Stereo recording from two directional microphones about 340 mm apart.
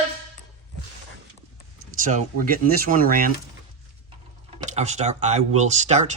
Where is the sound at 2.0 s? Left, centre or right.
Right.